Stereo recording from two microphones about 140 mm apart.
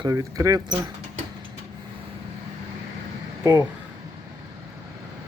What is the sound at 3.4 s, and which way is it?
Speech, 25° right (ahead or behind).